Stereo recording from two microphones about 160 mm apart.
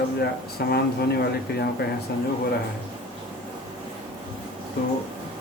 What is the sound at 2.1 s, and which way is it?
Speech, 90° left.